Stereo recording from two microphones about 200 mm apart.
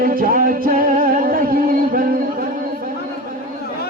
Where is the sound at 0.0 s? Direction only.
45° right (ahead or behind).